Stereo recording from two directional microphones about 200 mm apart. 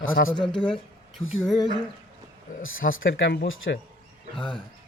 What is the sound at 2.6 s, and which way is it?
Speech, 80° left.